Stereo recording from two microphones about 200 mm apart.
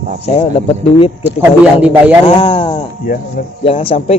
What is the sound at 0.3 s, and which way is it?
Speech, 30° left (ahead or behind).